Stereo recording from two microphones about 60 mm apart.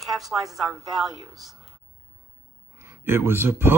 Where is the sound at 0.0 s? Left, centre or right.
Centre.